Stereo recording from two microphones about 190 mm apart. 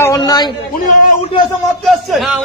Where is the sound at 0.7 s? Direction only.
45° left (ahead or behind).